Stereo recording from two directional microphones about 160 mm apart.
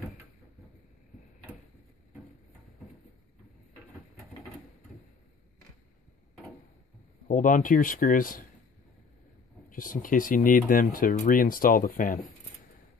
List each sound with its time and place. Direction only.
7.2 s speech: 55° left (ahead or behind)
9.8 s speech: 60° left (ahead or behind)